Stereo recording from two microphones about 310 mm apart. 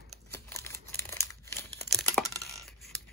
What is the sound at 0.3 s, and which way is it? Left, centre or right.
Crumpling, centre.